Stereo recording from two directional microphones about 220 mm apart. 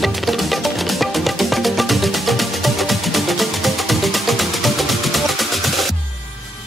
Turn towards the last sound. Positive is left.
turn(degrees=0)  # may be behind; listen again after turning